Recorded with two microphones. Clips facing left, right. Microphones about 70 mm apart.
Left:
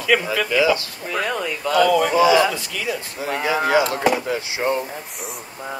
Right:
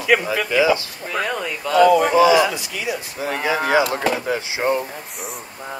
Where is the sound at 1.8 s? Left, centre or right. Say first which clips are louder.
Right 3 dB; centre.